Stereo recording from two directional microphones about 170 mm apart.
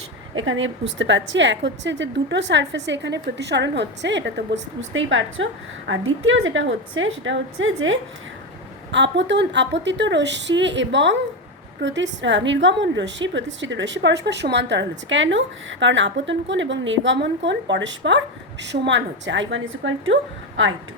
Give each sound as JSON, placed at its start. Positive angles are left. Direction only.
{"t": 0.5, "sound": "a woman's voice", "side_deg": -90}
{"t": 6.5, "sound": "a woman's voice", "side_deg": -90}